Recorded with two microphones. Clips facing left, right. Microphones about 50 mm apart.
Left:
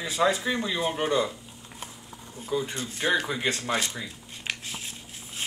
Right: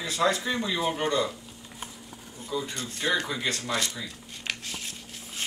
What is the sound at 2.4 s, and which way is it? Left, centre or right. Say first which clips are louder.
Speech: left 3 dB; centre.